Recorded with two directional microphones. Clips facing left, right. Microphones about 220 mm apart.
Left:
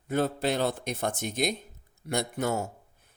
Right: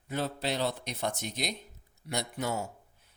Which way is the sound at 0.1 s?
50° left (ahead or behind).